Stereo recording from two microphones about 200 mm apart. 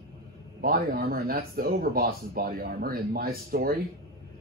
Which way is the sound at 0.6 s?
50° right (ahead or behind).